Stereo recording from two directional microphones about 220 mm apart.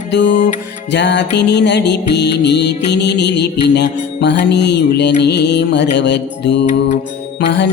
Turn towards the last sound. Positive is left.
turn(degrees=50)  # may be behind; listen again after turning